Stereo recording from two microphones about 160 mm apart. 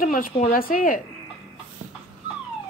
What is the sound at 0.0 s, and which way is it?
A woman's voice, 60° left (ahead or behind).